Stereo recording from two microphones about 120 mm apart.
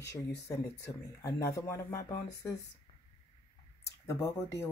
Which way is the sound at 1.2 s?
25° left (ahead or behind).